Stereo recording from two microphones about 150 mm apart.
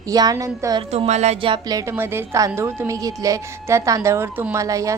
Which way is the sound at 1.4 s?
30° right (ahead or behind).